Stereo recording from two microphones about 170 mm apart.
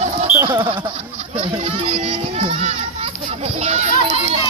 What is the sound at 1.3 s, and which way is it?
Children playing, 35° right (ahead or behind).